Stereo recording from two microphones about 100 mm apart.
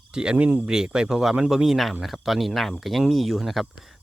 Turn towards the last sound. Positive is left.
turn(degrees=0)  # may be behind; listen again after turning